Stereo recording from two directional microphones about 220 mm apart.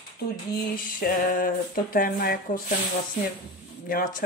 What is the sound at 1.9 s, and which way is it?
Speech, 40° left (ahead or behind).